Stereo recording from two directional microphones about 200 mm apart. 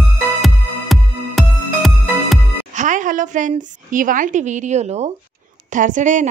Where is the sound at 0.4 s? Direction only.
Centre (ahead or behind).